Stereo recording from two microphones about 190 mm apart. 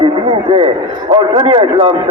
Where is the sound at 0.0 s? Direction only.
25° right (ahead or behind).